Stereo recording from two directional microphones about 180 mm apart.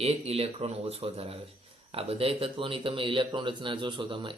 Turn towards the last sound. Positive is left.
turn(degrees=-25)  # may be behind; listen again after turning